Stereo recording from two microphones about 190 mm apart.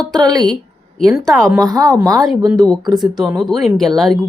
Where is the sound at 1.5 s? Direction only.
20° right (ahead or behind).